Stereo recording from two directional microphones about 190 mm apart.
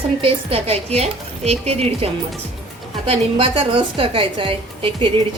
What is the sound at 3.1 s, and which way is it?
A woman's voice, 30° right (ahead or behind).